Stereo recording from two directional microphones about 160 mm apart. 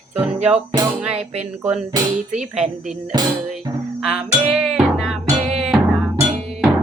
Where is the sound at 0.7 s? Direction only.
25° right (ahead or behind).